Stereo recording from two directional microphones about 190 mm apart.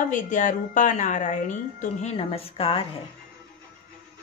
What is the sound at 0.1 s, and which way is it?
Speech, 40° left (ahead or behind).